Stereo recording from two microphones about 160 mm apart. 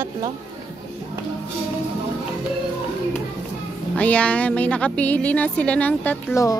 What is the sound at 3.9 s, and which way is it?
A woman's voice, 10° left (ahead or behind).